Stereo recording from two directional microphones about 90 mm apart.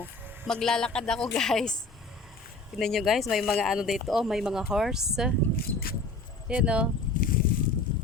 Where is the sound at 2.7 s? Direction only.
5° left (ahead or behind).